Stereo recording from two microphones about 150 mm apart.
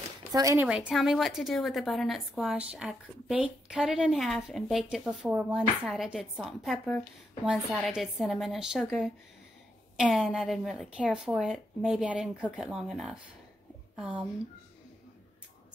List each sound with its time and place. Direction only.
0.3 s speech: 25° right (ahead or behind)
0.6 s a woman's voice: 5° right (ahead or behind)